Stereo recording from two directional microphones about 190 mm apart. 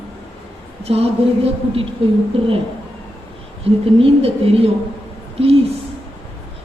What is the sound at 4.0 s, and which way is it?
Speech, 30° right (ahead or behind).